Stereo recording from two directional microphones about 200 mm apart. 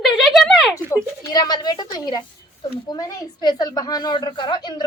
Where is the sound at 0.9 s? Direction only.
15° left (ahead or behind).